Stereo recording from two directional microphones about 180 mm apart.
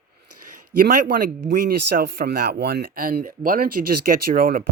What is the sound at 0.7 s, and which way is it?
A man's voice, 50° right (ahead or behind).